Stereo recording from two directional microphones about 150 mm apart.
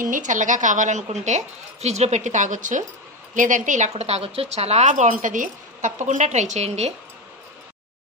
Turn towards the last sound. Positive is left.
turn(degrees=-45)  # may be behind; listen again after turning